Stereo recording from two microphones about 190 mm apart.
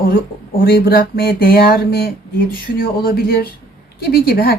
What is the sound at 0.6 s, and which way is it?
A woman's voice, 50° left (ahead or behind).